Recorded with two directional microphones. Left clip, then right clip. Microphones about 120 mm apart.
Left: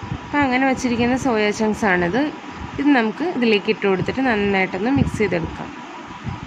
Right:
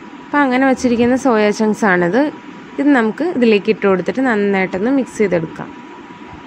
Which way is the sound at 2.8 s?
15° right (ahead or behind).